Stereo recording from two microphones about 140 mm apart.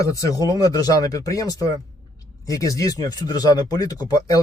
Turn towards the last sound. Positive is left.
turn(degrees=25)  # may be behind; listen again after turning